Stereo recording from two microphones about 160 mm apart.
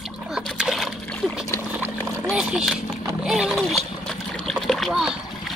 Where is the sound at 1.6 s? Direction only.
10° right (ahead or behind).